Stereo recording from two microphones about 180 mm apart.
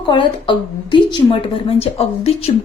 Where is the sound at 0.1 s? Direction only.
25° left (ahead or behind).